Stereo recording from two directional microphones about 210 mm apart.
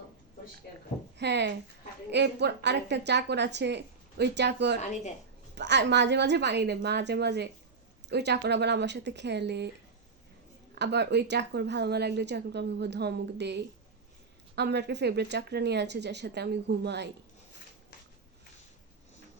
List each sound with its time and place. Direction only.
1.2 s a woman's voice: 55° right (ahead or behind)
4.8 s a woman's voice: 35° left (ahead or behind)
5.5 s a woman's voice: 55° right (ahead or behind)
10.8 s a woman's voice: 55° right (ahead or behind)